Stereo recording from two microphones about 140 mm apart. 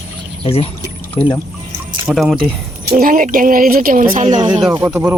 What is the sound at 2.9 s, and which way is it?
Speech, 85° right.